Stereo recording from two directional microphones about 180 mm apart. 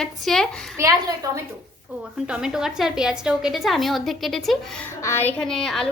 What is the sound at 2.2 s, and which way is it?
A woman's voice, 5° right (ahead or behind).